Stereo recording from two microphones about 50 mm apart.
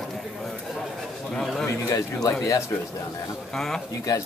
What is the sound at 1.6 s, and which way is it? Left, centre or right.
Speech, left.